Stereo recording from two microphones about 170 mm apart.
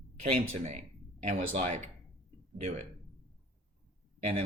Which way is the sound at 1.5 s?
35° right (ahead or behind).